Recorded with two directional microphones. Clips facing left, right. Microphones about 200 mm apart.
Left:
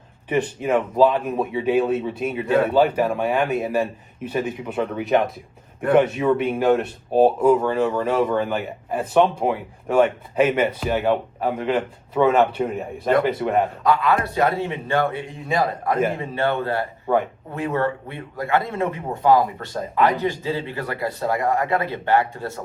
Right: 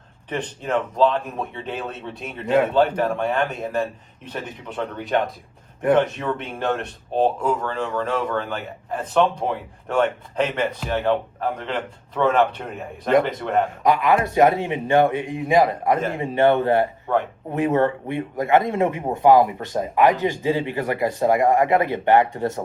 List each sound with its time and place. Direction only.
0.3 s speech: 10° left (ahead or behind)
13.8 s speech: 20° right (ahead or behind)